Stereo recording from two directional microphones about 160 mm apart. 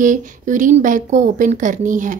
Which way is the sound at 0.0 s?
55° right (ahead or behind).